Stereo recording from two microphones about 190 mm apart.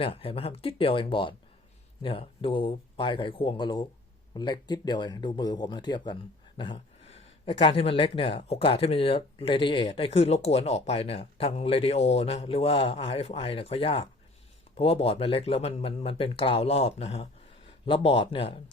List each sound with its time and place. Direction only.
0.0 s speech: 30° left (ahead or behind)